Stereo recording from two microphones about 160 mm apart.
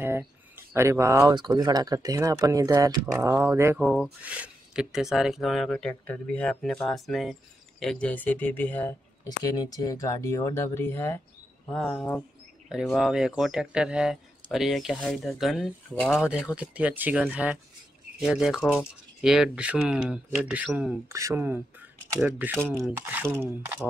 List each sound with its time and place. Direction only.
0.0 s speech: 15° right (ahead or behind)
3.7 s speech: 5° right (ahead or behind)
9.4 s speech: 25° left (ahead or behind)
11.7 s speech: 5° left (ahead or behind)
21.1 s speech: 20° right (ahead or behind)
22.6 s speech: 10° left (ahead or behind)
22.8 s speech: 15° right (ahead or behind)